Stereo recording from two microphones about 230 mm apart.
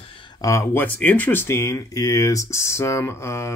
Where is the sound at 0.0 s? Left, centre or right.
Left.